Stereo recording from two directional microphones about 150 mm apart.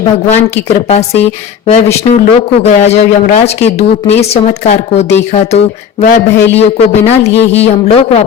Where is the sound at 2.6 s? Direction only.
50° left (ahead or behind).